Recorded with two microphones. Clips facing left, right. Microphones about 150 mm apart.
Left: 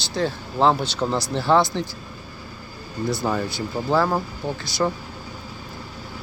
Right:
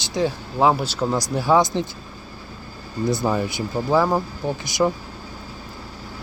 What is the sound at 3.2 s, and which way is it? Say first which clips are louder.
Speech: right 2 dB; 15° right (ahead or behind).